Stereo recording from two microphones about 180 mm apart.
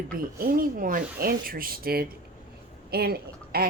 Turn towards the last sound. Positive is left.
turn(degrees=-60)  # may be behind; listen again after turning